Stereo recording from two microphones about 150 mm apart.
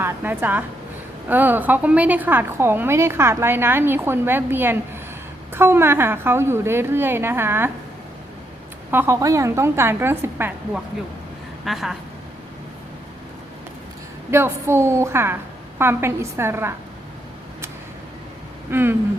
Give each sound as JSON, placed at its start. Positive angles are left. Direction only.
{"t": 0.0, "sound": "a woman's voice", "side_deg": -15}
{"t": 8.9, "sound": "a woman's voice", "side_deg": -15}
{"t": 11.6, "sound": "speech", "side_deg": 0}
{"t": 14.3, "sound": "a woman's voice", "side_deg": -15}
{"t": 18.7, "sound": "a woman's voice", "side_deg": -15}